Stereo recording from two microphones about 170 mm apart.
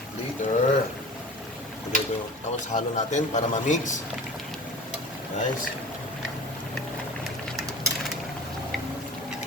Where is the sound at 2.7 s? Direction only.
45° left (ahead or behind).